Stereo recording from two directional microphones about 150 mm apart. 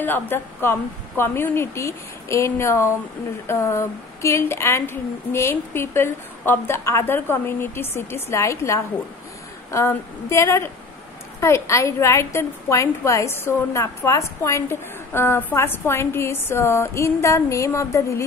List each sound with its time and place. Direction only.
0.0 s a woman's voice: 15° left (ahead or behind)